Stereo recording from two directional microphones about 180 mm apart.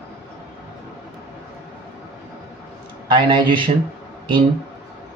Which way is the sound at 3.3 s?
25° right (ahead or behind).